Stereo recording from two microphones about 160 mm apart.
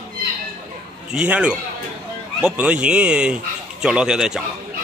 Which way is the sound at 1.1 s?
5° right (ahead or behind).